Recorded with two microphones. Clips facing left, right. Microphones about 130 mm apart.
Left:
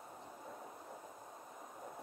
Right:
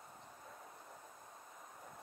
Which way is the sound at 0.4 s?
20° left (ahead or behind).